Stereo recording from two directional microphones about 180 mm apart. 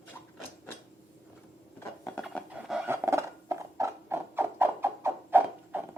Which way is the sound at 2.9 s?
15° right (ahead or behind).